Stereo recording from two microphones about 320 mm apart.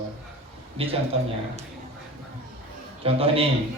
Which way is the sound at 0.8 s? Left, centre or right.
Centre.